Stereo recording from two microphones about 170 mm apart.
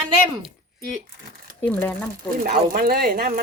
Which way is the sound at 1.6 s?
10° left (ahead or behind).